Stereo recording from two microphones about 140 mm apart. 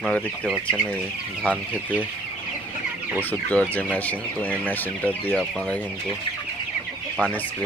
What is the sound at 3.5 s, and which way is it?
Speech, 10° left (ahead or behind).